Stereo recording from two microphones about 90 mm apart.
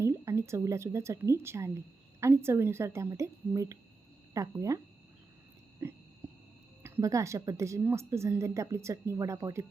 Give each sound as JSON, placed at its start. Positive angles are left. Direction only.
{"t": 0.0, "sound": "a woman's voice", "side_deg": -30}
{"t": 5.8, "sound": "a sound", "side_deg": -30}
{"t": 7.0, "sound": "a woman's voice", "side_deg": -35}